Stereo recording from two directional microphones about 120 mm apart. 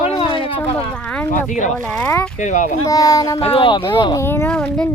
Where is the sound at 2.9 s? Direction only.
30° left (ahead or behind).